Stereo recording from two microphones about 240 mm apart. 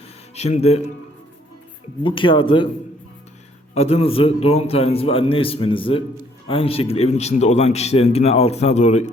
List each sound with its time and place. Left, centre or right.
0.3 s speech: left
2.0 s speech: left
3.8 s speech: left